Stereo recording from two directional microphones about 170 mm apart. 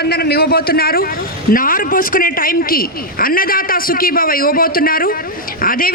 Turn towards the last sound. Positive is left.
turn(degrees=55)  # may be behind; listen again after turning